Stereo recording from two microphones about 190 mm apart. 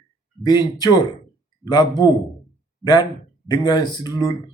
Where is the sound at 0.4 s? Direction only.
20° left (ahead or behind).